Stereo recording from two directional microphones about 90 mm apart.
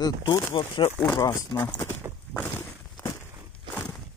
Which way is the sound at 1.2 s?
40° left (ahead or behind).